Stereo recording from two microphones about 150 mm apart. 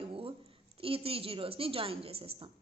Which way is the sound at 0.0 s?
40° right (ahead or behind).